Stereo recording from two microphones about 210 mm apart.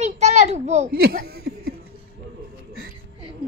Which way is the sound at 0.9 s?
45° right (ahead or behind).